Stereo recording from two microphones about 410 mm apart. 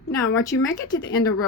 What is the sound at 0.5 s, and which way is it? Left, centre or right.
Speech, left.